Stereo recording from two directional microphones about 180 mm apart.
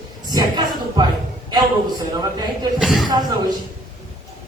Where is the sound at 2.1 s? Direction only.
20° right (ahead or behind).